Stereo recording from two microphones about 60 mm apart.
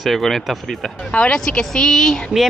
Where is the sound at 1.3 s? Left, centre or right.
Centre.